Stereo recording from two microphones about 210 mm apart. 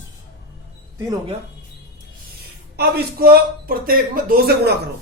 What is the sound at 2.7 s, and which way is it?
Speech, 50° right (ahead or behind).